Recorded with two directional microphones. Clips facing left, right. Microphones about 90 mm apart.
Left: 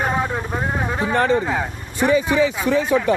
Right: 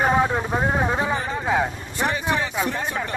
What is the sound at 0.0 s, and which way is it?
Vehicle, 10° right (ahead or behind).